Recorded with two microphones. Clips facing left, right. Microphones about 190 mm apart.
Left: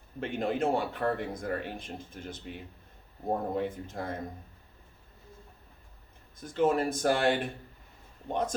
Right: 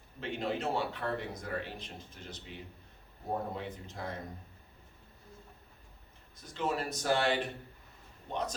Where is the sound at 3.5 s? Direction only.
50° left (ahead or behind).